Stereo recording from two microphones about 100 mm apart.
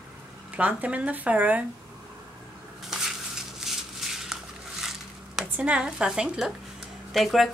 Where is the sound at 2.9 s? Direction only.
5° right (ahead or behind).